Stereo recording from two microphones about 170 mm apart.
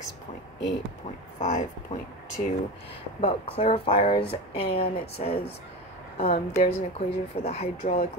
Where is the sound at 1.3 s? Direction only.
40° left (ahead or behind).